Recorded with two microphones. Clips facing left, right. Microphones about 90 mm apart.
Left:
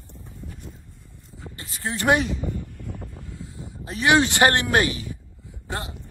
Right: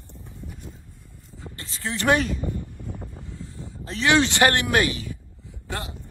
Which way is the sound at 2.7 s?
60° left (ahead or behind).